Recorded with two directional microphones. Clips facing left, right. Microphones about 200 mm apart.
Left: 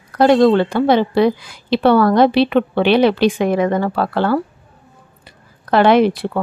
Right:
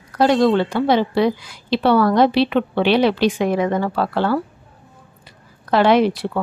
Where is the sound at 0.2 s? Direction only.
50° left (ahead or behind).